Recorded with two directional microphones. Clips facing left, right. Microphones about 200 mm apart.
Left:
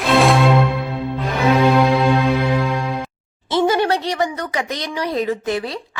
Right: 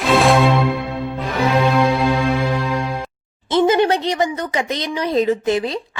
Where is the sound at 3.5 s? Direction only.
20° right (ahead or behind).